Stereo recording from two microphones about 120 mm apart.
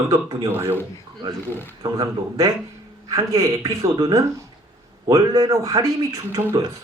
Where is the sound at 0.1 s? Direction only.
40° right (ahead or behind).